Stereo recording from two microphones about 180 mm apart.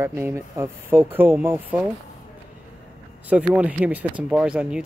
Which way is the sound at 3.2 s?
5° right (ahead or behind).